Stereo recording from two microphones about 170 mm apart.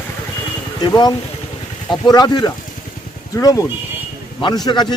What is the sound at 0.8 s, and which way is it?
A man's voice, 25° left (ahead or behind).